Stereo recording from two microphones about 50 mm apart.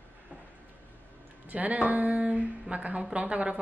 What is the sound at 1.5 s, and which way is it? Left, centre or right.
A woman's voice, right.